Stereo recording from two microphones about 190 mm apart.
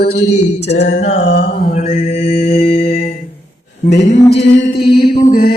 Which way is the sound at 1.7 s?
35° left (ahead or behind).